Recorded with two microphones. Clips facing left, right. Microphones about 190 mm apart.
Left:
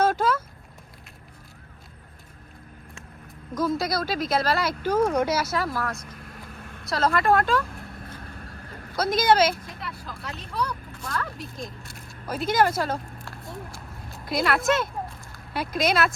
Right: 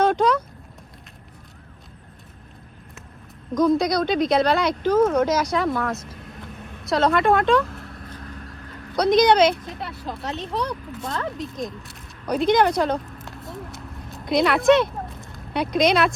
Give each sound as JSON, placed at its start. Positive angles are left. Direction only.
{"t": 0.0, "sound": "a sound", "side_deg": 5}
{"t": 3.5, "sound": "speech", "side_deg": 5}
{"t": 9.0, "sound": "speech", "side_deg": 5}
{"t": 11.0, "sound": "speech", "side_deg": -20}
{"t": 11.6, "sound": "speech", "side_deg": 0}
{"t": 14.1, "sound": "a sound", "side_deg": 0}
{"t": 15.5, "sound": "speech", "side_deg": 5}